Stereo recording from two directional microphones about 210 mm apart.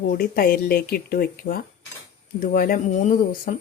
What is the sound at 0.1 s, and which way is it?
Speech, 45° left (ahead or behind).